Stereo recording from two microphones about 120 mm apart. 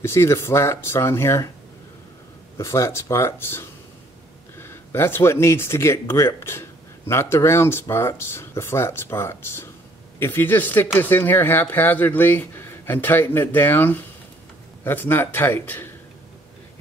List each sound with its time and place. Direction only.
0.0 s speech: 20° left (ahead or behind)
2.6 s speech: 25° left (ahead or behind)